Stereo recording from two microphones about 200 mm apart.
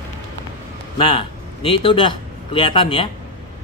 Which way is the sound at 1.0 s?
25° left (ahead or behind).